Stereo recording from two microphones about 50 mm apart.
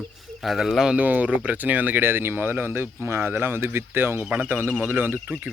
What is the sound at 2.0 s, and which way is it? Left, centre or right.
Speech, right.